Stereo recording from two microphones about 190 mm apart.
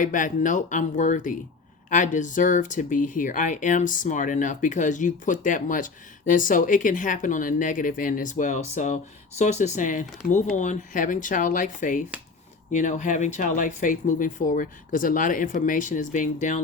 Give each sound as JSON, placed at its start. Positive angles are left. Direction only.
{"t": 0.0, "sound": "speech", "side_deg": 45}